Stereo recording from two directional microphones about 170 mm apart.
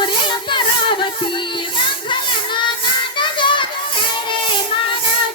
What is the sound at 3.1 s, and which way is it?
Children playing, 30° left (ahead or behind).